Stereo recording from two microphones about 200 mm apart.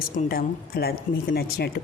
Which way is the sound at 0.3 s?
50° left (ahead or behind).